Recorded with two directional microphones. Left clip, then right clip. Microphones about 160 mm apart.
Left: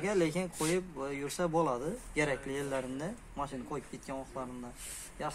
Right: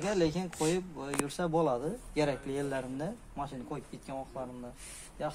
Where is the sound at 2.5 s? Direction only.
45° right (ahead or behind).